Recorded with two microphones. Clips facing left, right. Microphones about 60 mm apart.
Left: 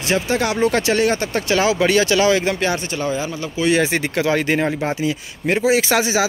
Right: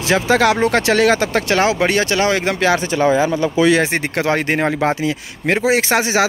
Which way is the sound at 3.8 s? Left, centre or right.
Right.